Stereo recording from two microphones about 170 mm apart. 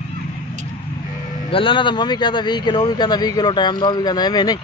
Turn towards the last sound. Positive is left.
turn(degrees=25)  # may be behind; listen again after turning